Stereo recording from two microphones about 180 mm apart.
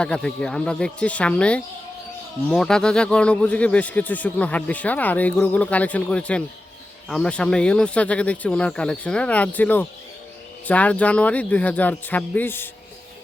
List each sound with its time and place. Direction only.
0.0 s a man's voice: 5° left (ahead or behind)